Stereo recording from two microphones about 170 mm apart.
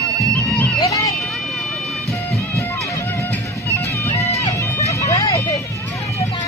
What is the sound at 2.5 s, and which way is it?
Music, 15° left (ahead or behind).